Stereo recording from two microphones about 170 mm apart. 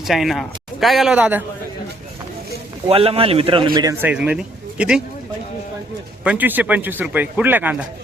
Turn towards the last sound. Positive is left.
turn(degrees=-10)  # may be behind; listen again after turning